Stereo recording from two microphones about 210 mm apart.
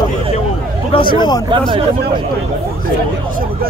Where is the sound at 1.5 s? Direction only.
25° right (ahead or behind).